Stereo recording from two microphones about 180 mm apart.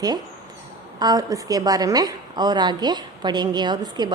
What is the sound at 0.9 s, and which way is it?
A woman's voice, 20° right (ahead or behind).